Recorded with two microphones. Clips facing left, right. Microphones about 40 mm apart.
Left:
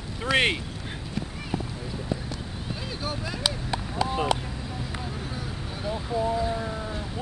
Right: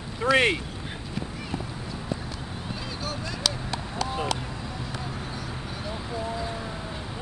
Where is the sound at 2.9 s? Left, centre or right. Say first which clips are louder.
Left 2 dB; centre.